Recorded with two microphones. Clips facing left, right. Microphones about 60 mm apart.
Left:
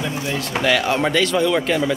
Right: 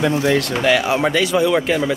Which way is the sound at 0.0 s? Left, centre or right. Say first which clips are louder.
Right 8 dB; right.